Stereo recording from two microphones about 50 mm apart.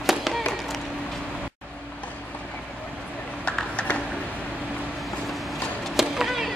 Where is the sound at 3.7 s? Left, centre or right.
Left.